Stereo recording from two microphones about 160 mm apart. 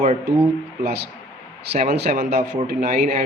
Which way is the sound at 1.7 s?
75° right (ahead or behind).